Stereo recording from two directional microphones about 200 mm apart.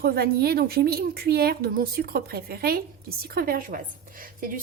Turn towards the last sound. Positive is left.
turn(degrees=-45)  # may be behind; listen again after turning